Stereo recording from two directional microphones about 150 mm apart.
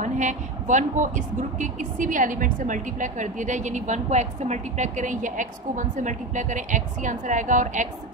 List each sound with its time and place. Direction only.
0.0 s a woman's voice: 55° right (ahead or behind)